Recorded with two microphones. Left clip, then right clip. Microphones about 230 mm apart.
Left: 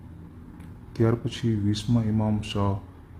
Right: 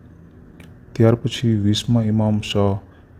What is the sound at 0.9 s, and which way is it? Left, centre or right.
A man's voice, right.